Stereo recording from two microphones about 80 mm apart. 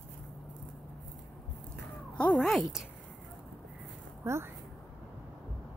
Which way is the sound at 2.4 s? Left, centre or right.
Centre.